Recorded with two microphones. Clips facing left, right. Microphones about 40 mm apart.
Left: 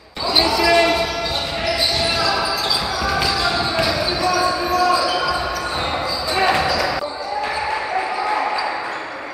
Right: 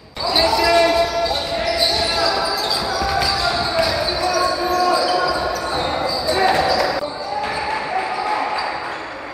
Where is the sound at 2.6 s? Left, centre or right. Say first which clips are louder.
Right 1 dB; left.